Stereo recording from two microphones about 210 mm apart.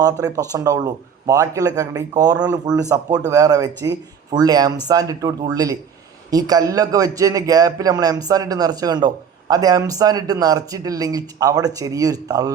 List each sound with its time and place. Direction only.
0.0 s a man's voice: 15° right (ahead or behind)